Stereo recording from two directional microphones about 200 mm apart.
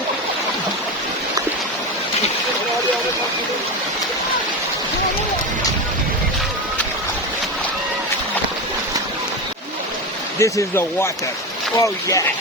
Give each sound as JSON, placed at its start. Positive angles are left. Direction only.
{"t": 10.3, "sound": "speech", "side_deg": 15}